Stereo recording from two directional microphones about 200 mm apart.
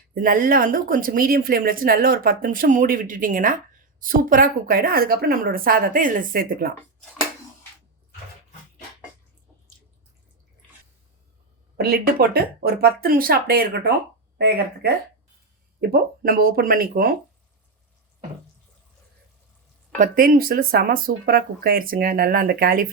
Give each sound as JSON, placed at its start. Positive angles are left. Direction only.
{"t": 0.1, "sound": "speech", "side_deg": -45}
{"t": 11.8, "sound": "speech", "side_deg": -50}
{"t": 15.9, "sound": "speech", "side_deg": -50}
{"t": 20.0, "sound": "speech", "side_deg": -40}